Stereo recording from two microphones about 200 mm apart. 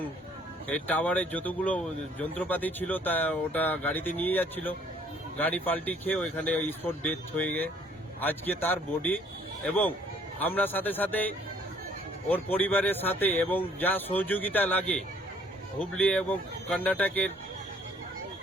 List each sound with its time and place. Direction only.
0.7 s speech: 5° left (ahead or behind)
12.3 s speech: 10° left (ahead or behind)